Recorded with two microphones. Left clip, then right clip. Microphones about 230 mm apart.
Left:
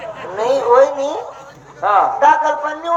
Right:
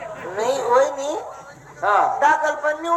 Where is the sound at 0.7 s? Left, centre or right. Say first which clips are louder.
Left 6 dB; right.